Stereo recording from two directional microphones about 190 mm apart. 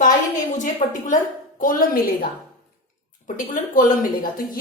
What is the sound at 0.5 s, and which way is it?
A woman's voice, 40° left (ahead or behind).